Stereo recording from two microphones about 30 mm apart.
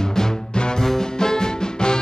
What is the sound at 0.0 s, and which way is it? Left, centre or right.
Music, left.